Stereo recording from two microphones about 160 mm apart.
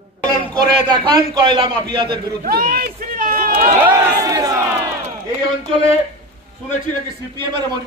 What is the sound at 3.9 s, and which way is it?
Crowd, 20° right (ahead or behind).